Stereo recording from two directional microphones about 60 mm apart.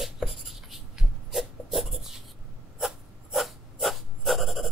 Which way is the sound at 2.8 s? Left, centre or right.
Centre.